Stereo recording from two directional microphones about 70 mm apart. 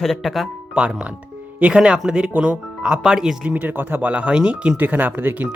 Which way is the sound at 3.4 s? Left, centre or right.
Right.